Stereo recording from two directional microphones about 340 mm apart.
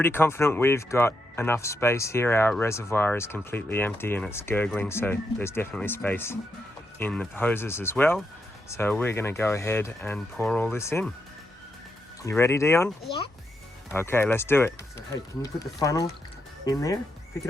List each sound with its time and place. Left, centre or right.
0.0 s speech: centre
12.2 s speech: centre